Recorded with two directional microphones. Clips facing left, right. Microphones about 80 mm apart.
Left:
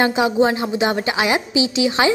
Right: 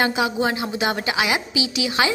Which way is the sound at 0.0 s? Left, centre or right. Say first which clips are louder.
Left 5 dB; left.